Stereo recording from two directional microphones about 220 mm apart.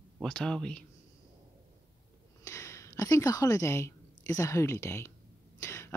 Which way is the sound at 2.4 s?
15° left (ahead or behind).